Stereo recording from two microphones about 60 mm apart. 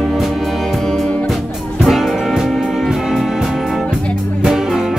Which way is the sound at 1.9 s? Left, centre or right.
Centre.